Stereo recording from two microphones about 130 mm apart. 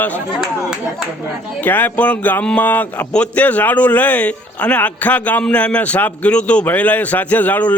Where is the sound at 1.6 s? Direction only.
15° left (ahead or behind).